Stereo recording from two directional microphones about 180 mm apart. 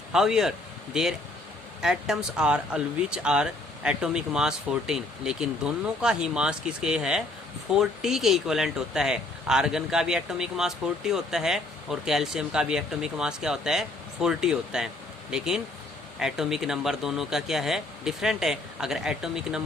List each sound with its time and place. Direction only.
0.1 s speech: 5° right (ahead or behind)